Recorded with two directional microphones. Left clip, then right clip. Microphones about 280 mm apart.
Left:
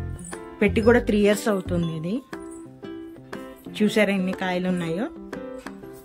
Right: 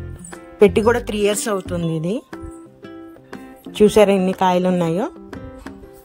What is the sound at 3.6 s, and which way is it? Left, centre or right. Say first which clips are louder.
Speech: right 9 dB; centre.